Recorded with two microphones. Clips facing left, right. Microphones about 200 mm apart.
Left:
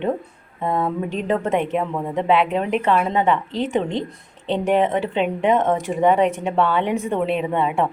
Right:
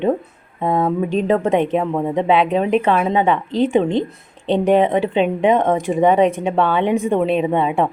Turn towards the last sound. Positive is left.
turn(degrees=-20)  # may be behind; listen again after turning